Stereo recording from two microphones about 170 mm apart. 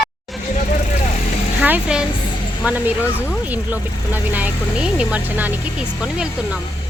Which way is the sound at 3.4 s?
10° right (ahead or behind).